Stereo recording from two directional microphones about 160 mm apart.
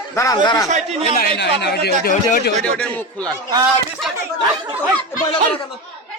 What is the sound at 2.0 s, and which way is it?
Speech, 70° left (ahead or behind).